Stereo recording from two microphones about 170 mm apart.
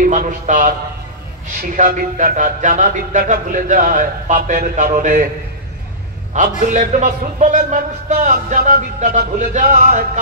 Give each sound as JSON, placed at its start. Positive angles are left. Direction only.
{"t": 0.0, "sound": "a man's voice", "side_deg": -50}
{"t": 1.8, "sound": "a man's voice", "side_deg": -50}
{"t": 6.3, "sound": "a man's voice", "side_deg": -50}